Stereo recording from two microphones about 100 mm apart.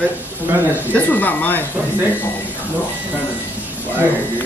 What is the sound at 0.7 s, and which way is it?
Speech, 20° left (ahead or behind).